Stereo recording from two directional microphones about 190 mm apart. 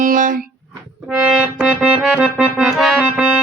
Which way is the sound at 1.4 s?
5° right (ahead or behind).